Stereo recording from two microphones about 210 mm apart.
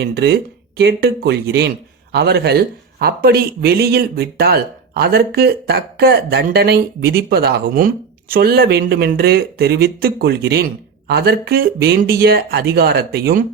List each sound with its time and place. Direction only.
0.0 s speech: 50° right (ahead or behind)